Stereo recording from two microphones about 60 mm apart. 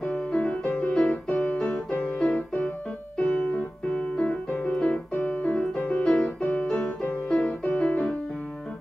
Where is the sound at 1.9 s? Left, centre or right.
Left.